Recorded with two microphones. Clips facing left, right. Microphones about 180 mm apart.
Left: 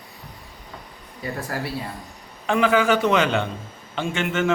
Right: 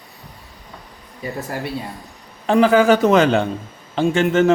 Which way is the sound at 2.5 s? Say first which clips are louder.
Right 6 dB; 35° right (ahead or behind).